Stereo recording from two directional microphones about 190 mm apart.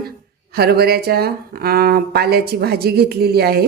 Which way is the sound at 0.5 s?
55° right (ahead or behind).